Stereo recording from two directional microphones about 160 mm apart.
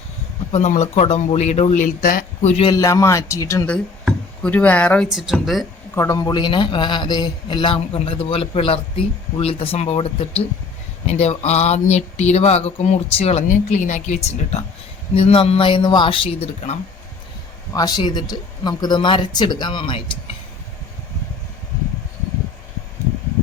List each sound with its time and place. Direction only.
0.5 s speech: 45° left (ahead or behind)
2.6 s a man's voice: 20° left (ahead or behind)
3.7 s speech: 5° left (ahead or behind)
5.1 s speech: 5° right (ahead or behind)
5.9 s a man's voice: 20° left (ahead or behind); by 16.7 s 40° left (ahead or behind)
17.7 s a man's voice: 25° left (ahead or behind)